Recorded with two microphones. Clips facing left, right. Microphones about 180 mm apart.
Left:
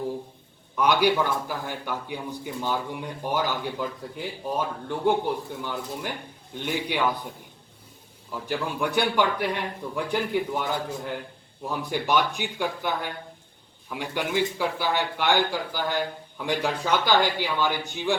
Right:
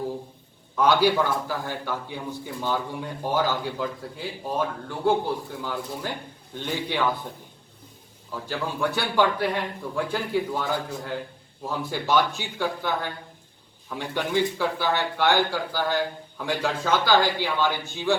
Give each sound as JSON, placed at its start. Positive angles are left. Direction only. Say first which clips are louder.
{"t": 0.8, "sound": "speech", "louder": "right 1 dB", "side_deg": 15}
{"t": 8.3, "sound": "speech", "louder": "left 1 dB", "side_deg": 15}